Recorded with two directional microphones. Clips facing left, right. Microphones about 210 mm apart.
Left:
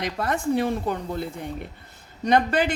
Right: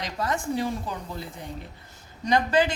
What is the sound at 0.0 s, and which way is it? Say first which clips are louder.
A woman's voice: left 3 dB; 60° left (ahead or behind).